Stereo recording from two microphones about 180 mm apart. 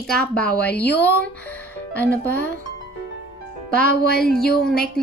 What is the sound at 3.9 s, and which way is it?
Music, 60° left (ahead or behind).